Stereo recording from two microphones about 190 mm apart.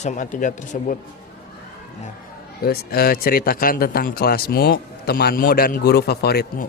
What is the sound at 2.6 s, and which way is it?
Speech, 55° left (ahead or behind).